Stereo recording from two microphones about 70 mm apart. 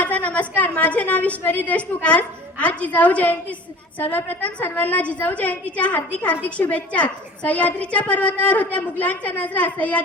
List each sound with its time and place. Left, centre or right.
0.0 s a woman's voice: left